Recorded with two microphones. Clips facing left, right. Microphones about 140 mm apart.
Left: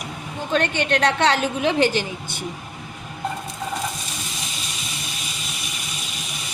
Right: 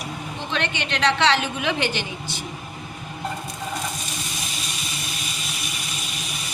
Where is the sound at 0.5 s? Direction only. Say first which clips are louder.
Left 7 dB; 45° left (ahead or behind).